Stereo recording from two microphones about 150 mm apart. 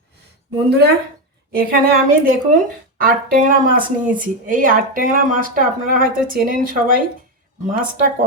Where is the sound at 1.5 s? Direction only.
75° right (ahead or behind).